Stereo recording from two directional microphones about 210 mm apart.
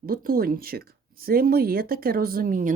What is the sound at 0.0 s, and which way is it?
Speech, 45° right (ahead or behind).